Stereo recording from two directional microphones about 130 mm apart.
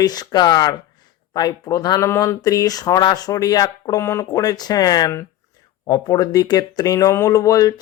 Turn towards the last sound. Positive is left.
turn(degrees=25)  # may be behind; listen again after turning